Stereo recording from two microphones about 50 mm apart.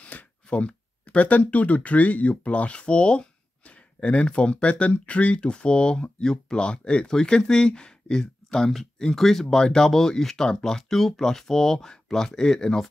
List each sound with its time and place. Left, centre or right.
0.0 s speech: left